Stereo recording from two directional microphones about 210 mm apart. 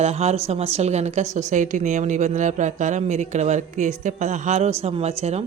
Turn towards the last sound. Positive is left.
turn(degrees=-30)  # may be behind; listen again after turning